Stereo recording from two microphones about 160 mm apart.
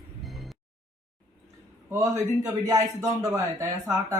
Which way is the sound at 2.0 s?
20° right (ahead or behind).